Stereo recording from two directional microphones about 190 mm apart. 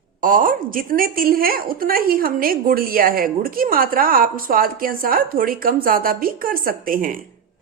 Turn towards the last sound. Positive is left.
turn(degrees=-45)  # may be behind; listen again after turning